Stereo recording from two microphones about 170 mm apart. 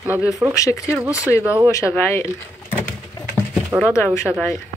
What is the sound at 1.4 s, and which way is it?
Speech, 10° right (ahead or behind).